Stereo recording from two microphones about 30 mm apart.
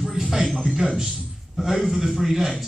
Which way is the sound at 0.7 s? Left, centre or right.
Centre.